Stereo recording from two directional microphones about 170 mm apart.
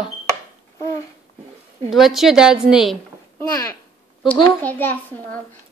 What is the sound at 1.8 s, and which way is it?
A woman's voice, centre (ahead or behind).